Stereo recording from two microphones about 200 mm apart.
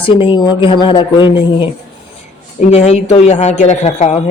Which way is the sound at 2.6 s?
35° left (ahead or behind).